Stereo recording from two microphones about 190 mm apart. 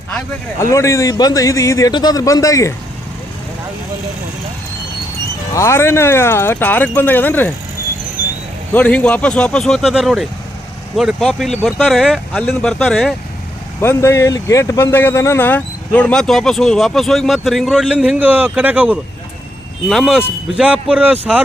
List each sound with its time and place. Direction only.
0.6 s a man's voice: 15° left (ahead or behind)
5.5 s a man's voice: 15° left (ahead or behind)
8.7 s speech: 5° left (ahead or behind)
13.8 s speech: 15° left (ahead or behind); by 21.4 s 10° right (ahead or behind)